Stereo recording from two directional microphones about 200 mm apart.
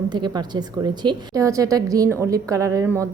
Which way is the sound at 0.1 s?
20° right (ahead or behind).